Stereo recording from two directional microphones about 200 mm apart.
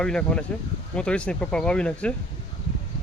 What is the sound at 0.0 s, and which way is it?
Speech, 5° left (ahead or behind).